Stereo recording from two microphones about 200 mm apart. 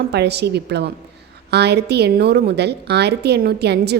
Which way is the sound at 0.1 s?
55° right (ahead or behind).